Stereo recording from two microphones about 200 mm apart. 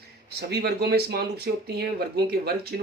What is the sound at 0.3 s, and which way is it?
Speech, 55° right (ahead or behind).